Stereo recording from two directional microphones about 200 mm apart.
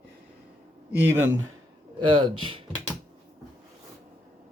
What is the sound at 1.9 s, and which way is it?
Speech, 25° right (ahead or behind).